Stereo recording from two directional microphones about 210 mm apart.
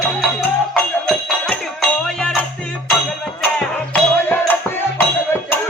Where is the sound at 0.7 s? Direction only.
Centre (ahead or behind).